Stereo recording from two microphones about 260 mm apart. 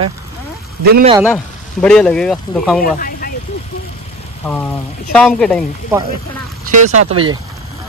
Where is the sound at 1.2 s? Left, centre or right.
Centre.